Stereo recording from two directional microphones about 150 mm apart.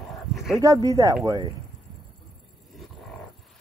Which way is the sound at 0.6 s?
25° right (ahead or behind).